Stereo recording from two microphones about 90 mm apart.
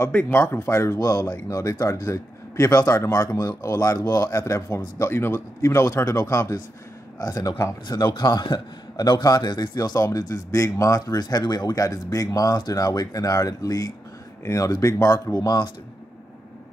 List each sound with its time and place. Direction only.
0.3 s speech: 30° left (ahead or behind)
8.1 s a man's voice: 50° left (ahead or behind)